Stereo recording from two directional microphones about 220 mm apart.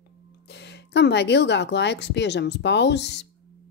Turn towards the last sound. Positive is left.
turn(degrees=50)  # may be behind; listen again after turning